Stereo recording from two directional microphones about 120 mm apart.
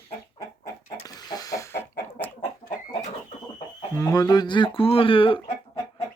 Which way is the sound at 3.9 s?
30° left (ahead or behind).